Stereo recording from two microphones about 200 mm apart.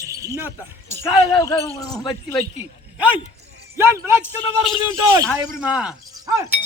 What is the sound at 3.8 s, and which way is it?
Speech, 15° right (ahead or behind).